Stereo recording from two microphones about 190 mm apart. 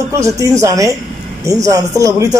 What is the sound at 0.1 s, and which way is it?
Speech, 15° right (ahead or behind).